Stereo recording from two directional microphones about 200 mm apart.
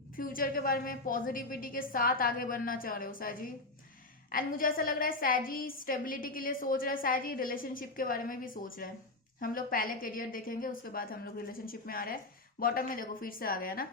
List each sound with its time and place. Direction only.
0.2 s a woman's voice: 45° left (ahead or behind)